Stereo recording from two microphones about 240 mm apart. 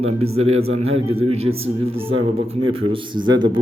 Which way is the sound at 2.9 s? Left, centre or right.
Right.